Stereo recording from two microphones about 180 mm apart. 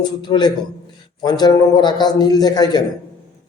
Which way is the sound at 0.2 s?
25° left (ahead or behind).